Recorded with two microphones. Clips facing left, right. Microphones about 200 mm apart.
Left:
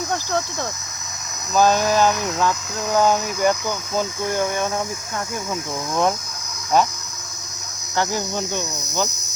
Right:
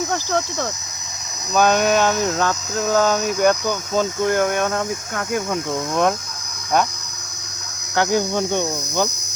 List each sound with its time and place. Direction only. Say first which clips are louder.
1.5 s cricket: even; 65° right (ahead or behind)
1.9 s speech: right 1 dB; 70° right (ahead or behind)
6.7 s cricket: left 1 dB; 55° right (ahead or behind)
7.9 s cricket: right 5 dB; 60° right (ahead or behind)